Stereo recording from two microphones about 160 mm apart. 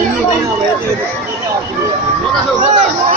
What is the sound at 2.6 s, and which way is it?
Speech, 50° right (ahead or behind).